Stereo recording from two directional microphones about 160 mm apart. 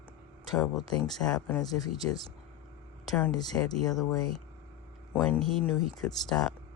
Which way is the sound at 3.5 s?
10° left (ahead or behind).